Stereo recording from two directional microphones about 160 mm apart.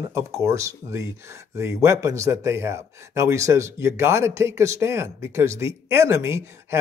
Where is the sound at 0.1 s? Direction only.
15° right (ahead or behind).